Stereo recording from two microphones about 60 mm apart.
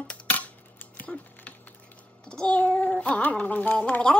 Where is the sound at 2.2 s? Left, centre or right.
Centre; by 4.0 s left.